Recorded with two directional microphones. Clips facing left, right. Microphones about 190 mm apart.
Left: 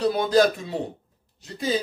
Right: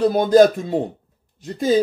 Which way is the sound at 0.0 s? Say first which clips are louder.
Right 6 dB; 50° right (ahead or behind).